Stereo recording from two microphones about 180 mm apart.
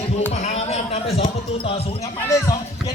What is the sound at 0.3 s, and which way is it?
Speech, 35° left (ahead or behind).